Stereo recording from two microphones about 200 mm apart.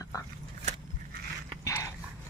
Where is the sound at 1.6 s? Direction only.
15° left (ahead or behind).